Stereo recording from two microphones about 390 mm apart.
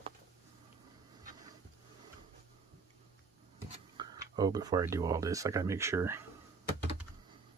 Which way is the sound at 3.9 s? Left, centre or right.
Centre.